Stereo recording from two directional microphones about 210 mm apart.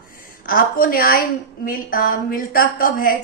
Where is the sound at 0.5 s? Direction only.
45° left (ahead or behind).